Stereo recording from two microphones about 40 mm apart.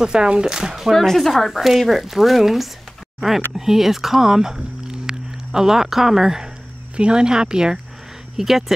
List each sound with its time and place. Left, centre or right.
0.0 s speech: right
0.9 s speech: centre
7.0 s speech: right
8.4 s speech: centre